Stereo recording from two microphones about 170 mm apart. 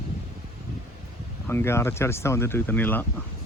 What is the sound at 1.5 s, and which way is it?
Speech, 15° left (ahead or behind).